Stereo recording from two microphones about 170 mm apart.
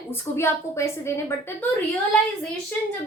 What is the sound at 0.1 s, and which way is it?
A woman's voice, 15° left (ahead or behind).